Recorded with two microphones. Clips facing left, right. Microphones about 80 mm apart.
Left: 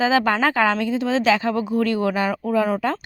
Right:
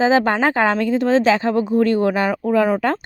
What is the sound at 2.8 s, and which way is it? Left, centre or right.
Speech, right.